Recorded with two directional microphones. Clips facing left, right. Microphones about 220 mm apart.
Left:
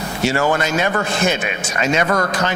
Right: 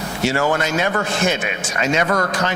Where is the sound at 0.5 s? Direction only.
15° left (ahead or behind).